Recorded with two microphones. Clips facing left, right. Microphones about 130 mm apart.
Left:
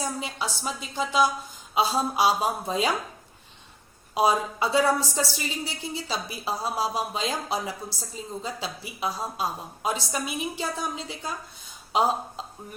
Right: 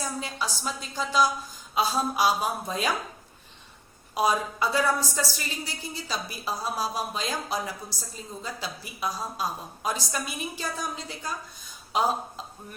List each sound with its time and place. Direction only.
0.0 s a woman's voice: 20° left (ahead or behind)
1.7 s a sound: 25° left (ahead or behind)
2.1 s a woman's voice: 25° left (ahead or behind)
4.1 s a woman's voice: 25° left (ahead or behind)